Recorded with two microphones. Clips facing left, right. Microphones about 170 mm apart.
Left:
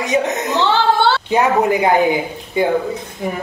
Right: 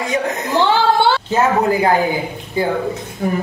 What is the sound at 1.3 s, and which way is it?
A woman's voice, 15° left (ahead or behind).